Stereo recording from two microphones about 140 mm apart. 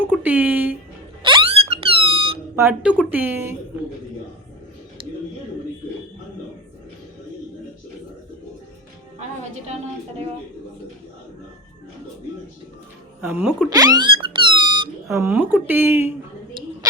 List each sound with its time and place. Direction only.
0.0 s speech: 10° right (ahead or behind)
1.2 s a sound: 35° right (ahead or behind)
2.6 s speech: 15° right (ahead or behind)
9.1 s music: 55° right (ahead or behind)
13.2 s speech: 15° right (ahead or behind)
13.7 s a sound: 25° right (ahead or behind)
15.1 s speech: 15° right (ahead or behind)